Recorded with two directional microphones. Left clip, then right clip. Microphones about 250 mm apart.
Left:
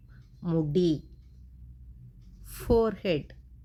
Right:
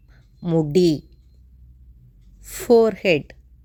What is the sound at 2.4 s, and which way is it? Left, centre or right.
Speech, right.